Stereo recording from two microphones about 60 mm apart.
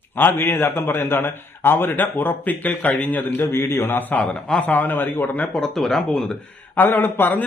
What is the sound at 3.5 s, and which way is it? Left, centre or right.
Speech, left.